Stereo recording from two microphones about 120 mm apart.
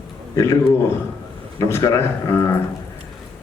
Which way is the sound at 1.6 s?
25° left (ahead or behind).